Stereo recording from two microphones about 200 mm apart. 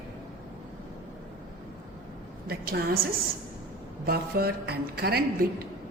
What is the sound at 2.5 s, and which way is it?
Speech, 50° right (ahead or behind).